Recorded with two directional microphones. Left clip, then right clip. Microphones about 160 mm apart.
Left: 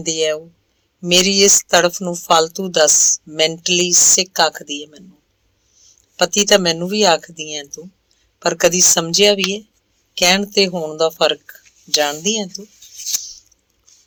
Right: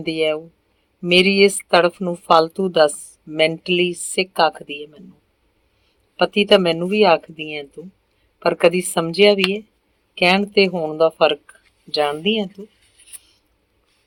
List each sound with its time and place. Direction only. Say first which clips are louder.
0.0 s speech: left 1 dB; 40° left (ahead or behind)
6.1 s speech: left 1 dB; 40° left (ahead or behind)